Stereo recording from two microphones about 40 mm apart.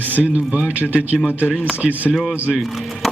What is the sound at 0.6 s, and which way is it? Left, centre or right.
Speech, right.